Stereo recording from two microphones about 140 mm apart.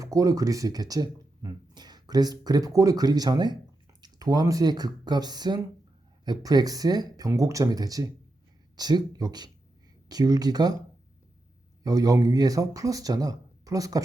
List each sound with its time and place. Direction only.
0.0 s speech: 25° right (ahead or behind)